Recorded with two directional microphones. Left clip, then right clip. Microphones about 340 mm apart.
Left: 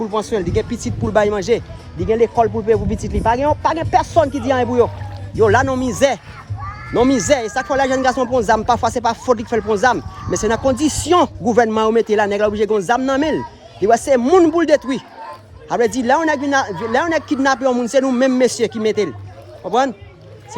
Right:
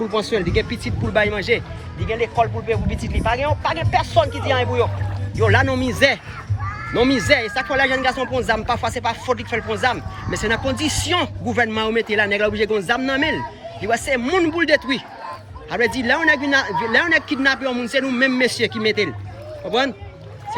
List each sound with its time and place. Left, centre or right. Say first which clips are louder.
0.1 s speech: left 1 dB; centre
2.0 s speech: left 5 dB; left
3.9 s speech: left 3 dB; centre
6.6 s crow: left 3 dB; left
7.0 s speech: left 2 dB; centre